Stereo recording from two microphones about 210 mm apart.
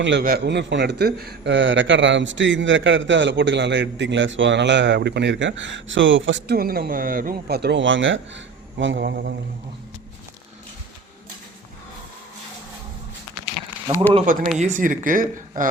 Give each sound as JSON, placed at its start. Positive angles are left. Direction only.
{"t": 0.0, "sound": "a man's voice", "side_deg": -50}
{"t": 6.6, "sound": "a man's voice", "side_deg": -45}
{"t": 13.9, "sound": "speech", "side_deg": -25}
{"t": 14.6, "sound": "speech", "side_deg": -35}